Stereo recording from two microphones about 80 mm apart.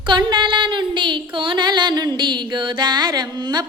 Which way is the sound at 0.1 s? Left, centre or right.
Right.